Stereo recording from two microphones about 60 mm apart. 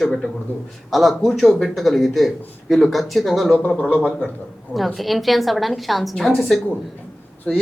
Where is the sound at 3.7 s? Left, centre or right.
Centre.